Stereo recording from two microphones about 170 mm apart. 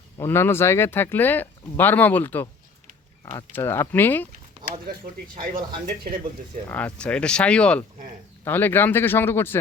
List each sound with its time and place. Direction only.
0.2 s speech: 15° left (ahead or behind)
5.5 s speech: 55° right (ahead or behind)
6.7 s speech: 10° left (ahead or behind)